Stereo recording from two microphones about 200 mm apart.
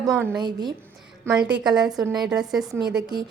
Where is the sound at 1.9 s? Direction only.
20° right (ahead or behind).